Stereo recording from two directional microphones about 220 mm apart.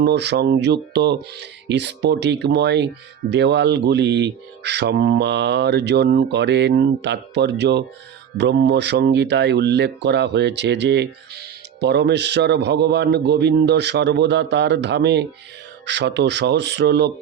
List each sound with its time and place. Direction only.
0.0 s speech: 50° right (ahead or behind)